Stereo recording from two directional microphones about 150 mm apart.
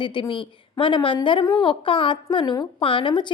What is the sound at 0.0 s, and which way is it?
A woman's voice, 35° left (ahead or behind).